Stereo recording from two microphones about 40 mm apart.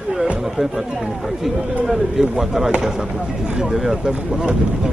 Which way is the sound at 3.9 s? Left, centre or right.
Centre.